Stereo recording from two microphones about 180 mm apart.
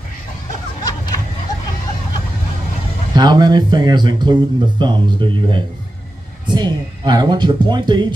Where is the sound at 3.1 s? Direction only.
25° right (ahead or behind).